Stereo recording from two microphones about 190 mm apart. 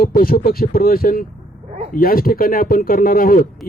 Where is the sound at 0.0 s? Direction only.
50° left (ahead or behind).